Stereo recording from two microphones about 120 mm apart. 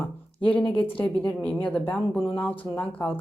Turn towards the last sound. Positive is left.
turn(degrees=15)  # may be behind; listen again after turning